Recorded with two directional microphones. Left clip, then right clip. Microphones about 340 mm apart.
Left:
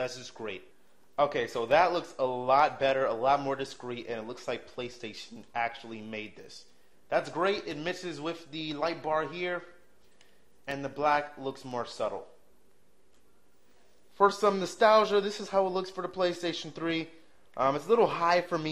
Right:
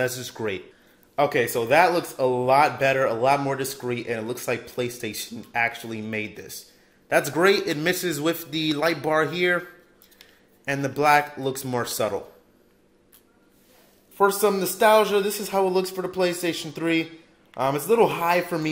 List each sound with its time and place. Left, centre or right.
0.0 s a man's voice: right
1.1 s a man's voice: right
10.6 s a man's voice: right
14.1 s a man's voice: centre